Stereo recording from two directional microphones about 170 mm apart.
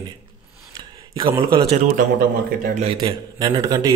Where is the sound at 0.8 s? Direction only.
25° right (ahead or behind).